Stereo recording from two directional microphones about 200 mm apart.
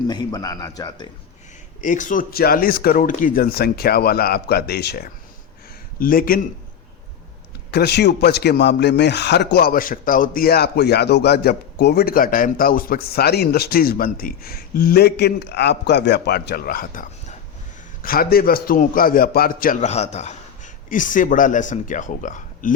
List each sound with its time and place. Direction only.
0.1 s speech: 20° left (ahead or behind)
1.8 s a man's voice: 40° left (ahead or behind)
7.7 s a man's voice: 55° left (ahead or behind)